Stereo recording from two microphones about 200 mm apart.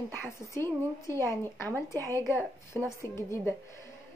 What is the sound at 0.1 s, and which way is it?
A woman's voice, 10° left (ahead or behind).